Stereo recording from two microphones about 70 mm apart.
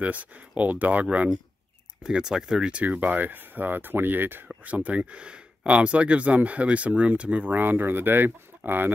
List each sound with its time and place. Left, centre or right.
0.0 s speech: right
2.0 s speech: centre; by 8.9 s right